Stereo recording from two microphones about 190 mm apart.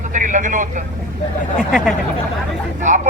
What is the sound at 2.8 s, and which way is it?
Speech, 40° right (ahead or behind).